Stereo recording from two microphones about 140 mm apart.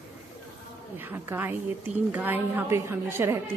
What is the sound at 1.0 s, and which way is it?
A woman's voice, 15° right (ahead or behind).